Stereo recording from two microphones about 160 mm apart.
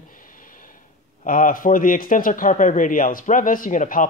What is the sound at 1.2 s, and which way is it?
Speech, 60° left (ahead or behind).